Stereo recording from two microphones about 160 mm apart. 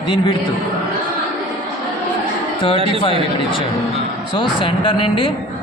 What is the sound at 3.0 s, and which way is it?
Speech, 35° left (ahead or behind).